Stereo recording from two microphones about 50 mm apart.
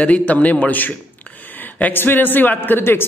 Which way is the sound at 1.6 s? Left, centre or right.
Left.